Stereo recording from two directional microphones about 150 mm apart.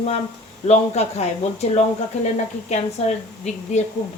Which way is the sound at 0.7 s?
50° left (ahead or behind).